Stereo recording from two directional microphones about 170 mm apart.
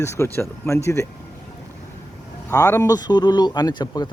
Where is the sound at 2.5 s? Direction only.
20° left (ahead or behind).